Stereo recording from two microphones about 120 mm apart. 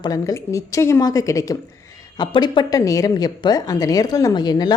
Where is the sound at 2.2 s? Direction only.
40° left (ahead or behind).